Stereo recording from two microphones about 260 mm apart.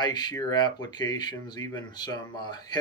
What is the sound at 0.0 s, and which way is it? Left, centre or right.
Speech, centre.